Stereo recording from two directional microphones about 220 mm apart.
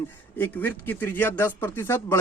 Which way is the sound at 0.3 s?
10° left (ahead or behind).